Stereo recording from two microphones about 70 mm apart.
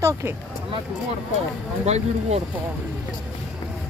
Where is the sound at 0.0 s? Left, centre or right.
Right.